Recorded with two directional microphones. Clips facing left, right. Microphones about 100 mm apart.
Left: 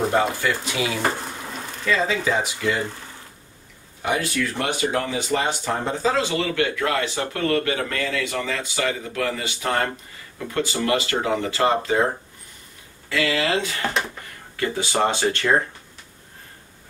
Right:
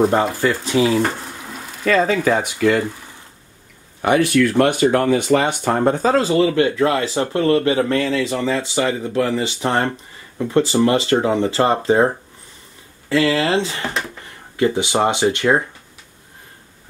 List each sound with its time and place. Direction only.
0.4 s speech: 35° right (ahead or behind)
1.9 s speech: 55° right (ahead or behind)
4.0 s speech: 65° right (ahead or behind); by 12.1 s 30° right (ahead or behind)
13.1 s speech: 30° right (ahead or behind); by 15.6 s 15° right (ahead or behind)